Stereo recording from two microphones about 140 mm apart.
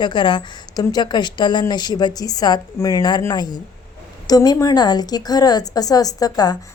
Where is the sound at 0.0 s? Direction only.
35° left (ahead or behind).